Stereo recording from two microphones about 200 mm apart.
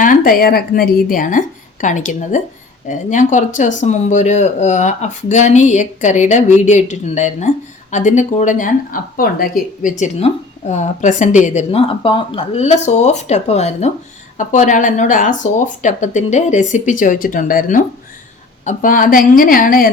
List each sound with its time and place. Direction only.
0.0 s a woman's voice: 45° left (ahead or behind)
10.0 s a woman's voice: 35° left (ahead or behind)